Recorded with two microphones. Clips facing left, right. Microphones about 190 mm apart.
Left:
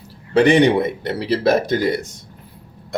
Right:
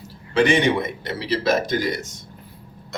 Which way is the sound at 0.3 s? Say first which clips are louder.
Left 5 dB; 65° left (ahead or behind).